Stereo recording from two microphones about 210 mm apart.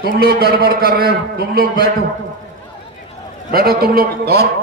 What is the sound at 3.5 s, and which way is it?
Speech, 45° right (ahead or behind).